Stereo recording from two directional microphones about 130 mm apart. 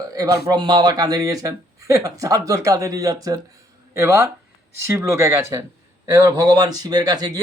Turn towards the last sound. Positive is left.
turn(degrees=-30)  # may be behind; listen again after turning